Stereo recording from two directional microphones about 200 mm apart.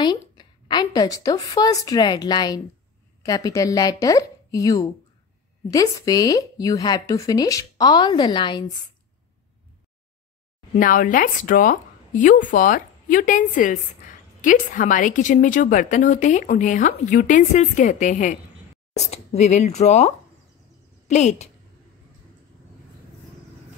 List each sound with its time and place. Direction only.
0.0 s a woman's voice: 20° left (ahead or behind)
10.8 s speech: 45° left (ahead or behind)